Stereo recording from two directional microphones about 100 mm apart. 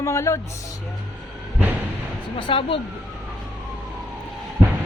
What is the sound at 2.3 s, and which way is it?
Speech, 60° left (ahead or behind).